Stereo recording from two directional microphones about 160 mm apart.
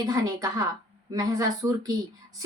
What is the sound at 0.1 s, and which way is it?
A woman's voice, 20° right (ahead or behind).